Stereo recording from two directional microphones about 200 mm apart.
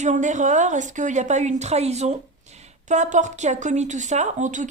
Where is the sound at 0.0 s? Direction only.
35° right (ahead or behind).